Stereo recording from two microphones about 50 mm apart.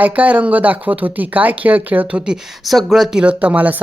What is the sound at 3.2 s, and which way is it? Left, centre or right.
Speech, right.